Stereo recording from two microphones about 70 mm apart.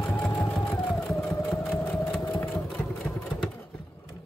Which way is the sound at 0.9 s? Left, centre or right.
Centre.